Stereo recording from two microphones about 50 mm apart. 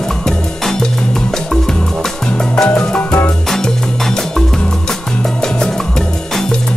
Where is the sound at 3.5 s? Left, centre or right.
Centre.